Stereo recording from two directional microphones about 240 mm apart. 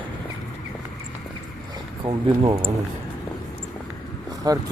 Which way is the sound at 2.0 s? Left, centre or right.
Right.